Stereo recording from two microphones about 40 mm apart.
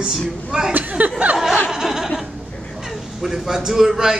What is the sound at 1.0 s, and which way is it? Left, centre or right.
Speech, right.